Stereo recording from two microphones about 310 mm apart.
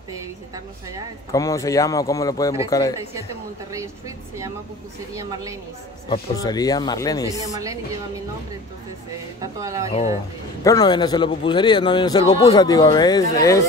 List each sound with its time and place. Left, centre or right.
1.3 s a man's voice: centre
5.1 s a woman's voice: centre
6.0 s a man's voice: centre
7.3 s a woman's voice: centre
9.4 s a woman's voice: centre
9.8 s a man's voice: centre